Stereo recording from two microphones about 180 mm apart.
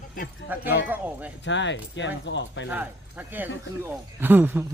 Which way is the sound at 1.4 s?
90° left.